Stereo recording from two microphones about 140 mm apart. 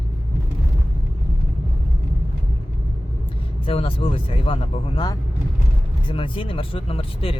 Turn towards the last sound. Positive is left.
turn(degrees=40)  # may be behind; listen again after turning